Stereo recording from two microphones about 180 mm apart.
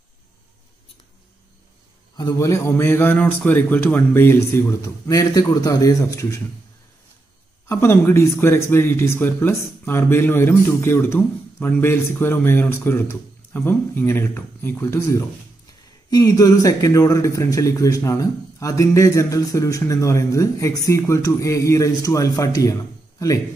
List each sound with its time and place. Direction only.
2.1 s speech: 20° left (ahead or behind)
7.6 s speech: 15° left (ahead or behind)